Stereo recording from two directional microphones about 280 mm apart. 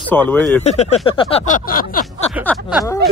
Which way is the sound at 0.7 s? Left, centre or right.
Left.